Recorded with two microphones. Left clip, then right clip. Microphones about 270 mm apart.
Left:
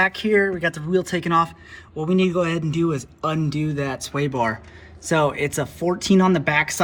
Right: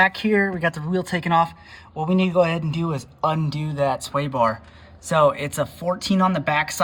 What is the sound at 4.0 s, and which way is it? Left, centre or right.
Speech, centre.